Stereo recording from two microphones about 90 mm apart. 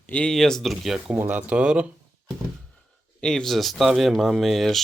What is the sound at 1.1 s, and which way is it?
Speech, 20° right (ahead or behind).